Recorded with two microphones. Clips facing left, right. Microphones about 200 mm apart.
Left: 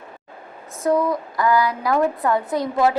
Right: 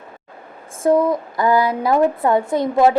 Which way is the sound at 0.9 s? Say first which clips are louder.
Right 4 dB; 25° right (ahead or behind).